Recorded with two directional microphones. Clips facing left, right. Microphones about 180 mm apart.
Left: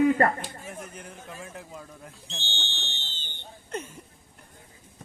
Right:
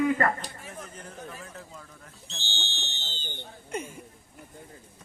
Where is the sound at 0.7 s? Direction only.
15° left (ahead or behind).